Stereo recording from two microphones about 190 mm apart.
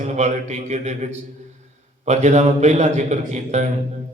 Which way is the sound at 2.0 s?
40° right (ahead or behind).